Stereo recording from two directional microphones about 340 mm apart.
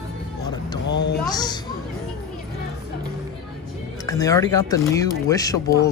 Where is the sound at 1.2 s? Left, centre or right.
Centre.